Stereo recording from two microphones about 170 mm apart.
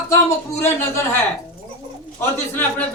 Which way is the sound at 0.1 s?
15° left (ahead or behind).